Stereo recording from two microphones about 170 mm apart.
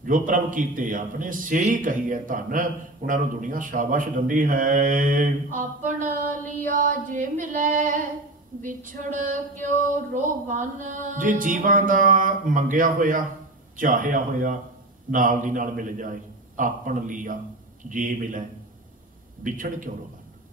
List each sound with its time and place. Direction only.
0.0 s a man's voice: 50° right (ahead or behind)
19.4 s a man's voice: 50° right (ahead or behind)